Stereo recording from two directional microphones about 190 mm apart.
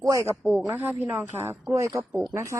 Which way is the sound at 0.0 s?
15° right (ahead or behind).